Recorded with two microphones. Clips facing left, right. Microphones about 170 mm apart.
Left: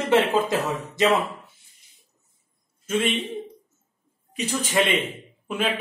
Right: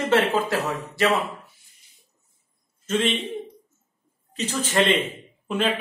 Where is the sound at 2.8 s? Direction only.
10° left (ahead or behind).